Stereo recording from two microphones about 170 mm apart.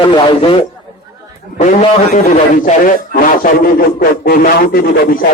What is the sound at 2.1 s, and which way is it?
A man's voice, 55° left (ahead or behind).